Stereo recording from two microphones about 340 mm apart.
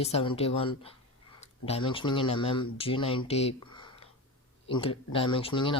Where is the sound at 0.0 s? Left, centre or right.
Centre.